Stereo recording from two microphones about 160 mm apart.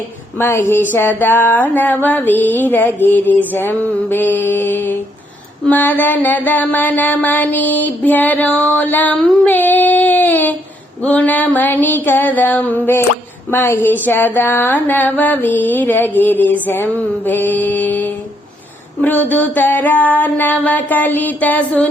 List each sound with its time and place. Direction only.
0.3 s mantra: 15° left (ahead or behind)